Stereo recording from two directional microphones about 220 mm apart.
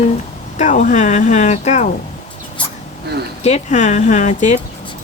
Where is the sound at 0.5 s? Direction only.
35° left (ahead or behind).